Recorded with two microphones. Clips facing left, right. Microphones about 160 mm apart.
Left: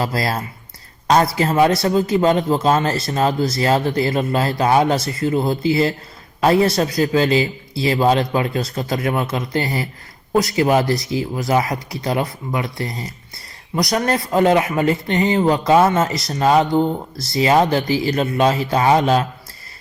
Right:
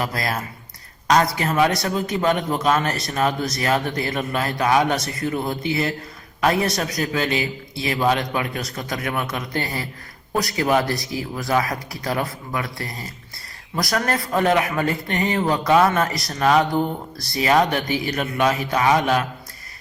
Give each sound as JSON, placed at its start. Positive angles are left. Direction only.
{"t": 0.0, "sound": "speech", "side_deg": 30}